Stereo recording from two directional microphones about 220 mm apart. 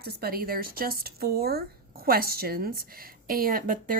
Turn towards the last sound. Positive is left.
turn(degrees=-40)  # may be behind; listen again after turning